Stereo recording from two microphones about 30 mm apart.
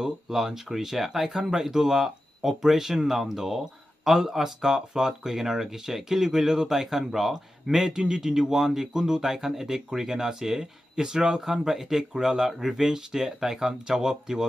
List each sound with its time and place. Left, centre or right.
0.3 s speech: centre
1.5 s speech: right
4.6 s speech: right
7.9 s speech: right